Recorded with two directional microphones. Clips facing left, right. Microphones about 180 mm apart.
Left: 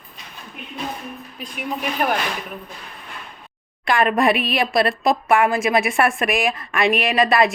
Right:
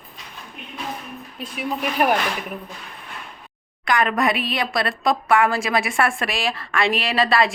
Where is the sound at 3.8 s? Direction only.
25° left (ahead or behind).